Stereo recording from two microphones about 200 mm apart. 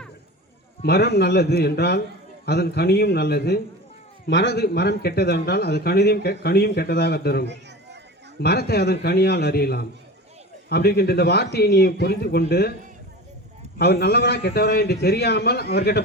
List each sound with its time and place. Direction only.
0.8 s speech: 55° left (ahead or behind)
13.7 s speech: 50° left (ahead or behind)